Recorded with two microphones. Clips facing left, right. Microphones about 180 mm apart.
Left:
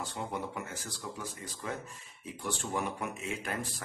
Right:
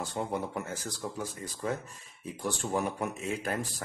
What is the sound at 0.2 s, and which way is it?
Speech, 45° right (ahead or behind).